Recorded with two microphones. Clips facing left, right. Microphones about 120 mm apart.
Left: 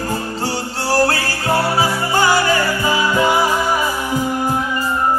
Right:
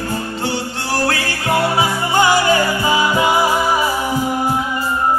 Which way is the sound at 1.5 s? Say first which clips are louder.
Even; 20° right (ahead or behind).